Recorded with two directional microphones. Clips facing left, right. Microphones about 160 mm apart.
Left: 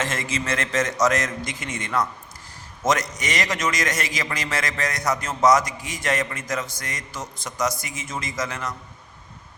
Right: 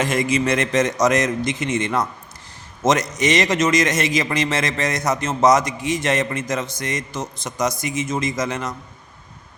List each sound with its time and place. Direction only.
0.0 s a man's voice: 15° right (ahead or behind)